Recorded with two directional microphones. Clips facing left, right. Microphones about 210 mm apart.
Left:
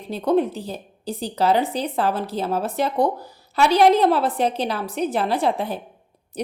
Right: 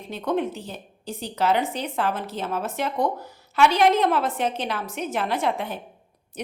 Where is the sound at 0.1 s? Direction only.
35° left (ahead or behind).